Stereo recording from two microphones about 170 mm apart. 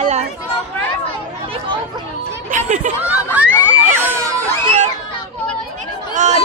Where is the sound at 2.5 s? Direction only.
45° right (ahead or behind).